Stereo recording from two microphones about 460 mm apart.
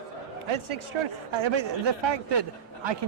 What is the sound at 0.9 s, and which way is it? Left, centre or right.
Speech, right.